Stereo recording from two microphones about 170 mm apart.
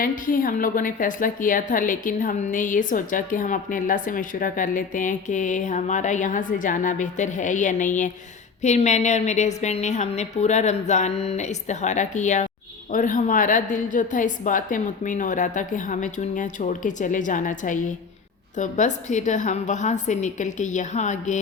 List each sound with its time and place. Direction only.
0.0 s a woman's voice: 55° left (ahead or behind)